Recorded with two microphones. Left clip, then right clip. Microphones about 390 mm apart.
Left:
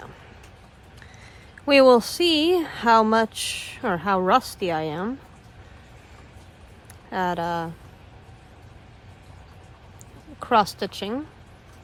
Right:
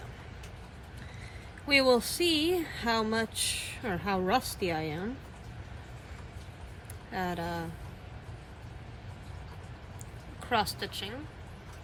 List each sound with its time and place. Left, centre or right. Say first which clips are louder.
1.6 s speech: left 10 dB; centre
7.1 s speech: left 10 dB; centre
10.5 s speech: left 10 dB; centre